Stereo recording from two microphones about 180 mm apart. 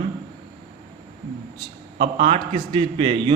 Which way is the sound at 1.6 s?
30° right (ahead or behind).